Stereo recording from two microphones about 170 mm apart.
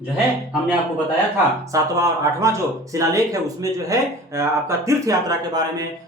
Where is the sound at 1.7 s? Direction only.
20° right (ahead or behind).